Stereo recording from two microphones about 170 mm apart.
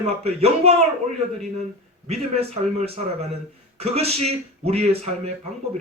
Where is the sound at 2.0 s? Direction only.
40° right (ahead or behind).